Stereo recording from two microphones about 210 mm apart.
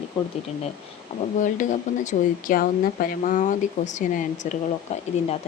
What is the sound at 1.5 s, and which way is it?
Speech, 35° left (ahead or behind).